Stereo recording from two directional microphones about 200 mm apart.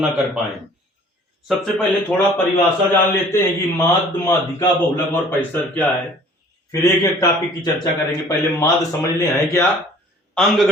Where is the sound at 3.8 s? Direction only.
10° left (ahead or behind).